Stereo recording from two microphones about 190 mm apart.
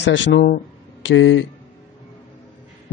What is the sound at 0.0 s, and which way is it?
A man's voice, 75° left (ahead or behind).